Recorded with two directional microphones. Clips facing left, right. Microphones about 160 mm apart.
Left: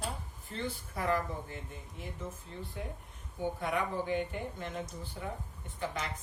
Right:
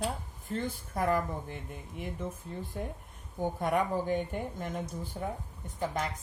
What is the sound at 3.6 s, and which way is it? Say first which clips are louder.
Speech: right 6 dB; 45° right (ahead or behind).